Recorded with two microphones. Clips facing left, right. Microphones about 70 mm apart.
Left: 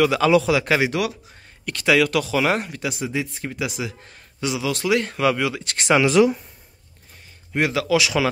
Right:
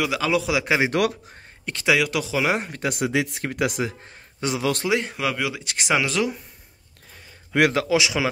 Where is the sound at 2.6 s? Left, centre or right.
Right.